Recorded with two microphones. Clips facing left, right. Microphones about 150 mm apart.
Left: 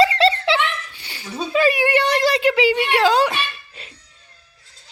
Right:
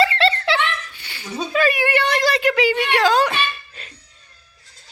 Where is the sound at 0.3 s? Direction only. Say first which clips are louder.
Left 2 dB; 25° left (ahead or behind).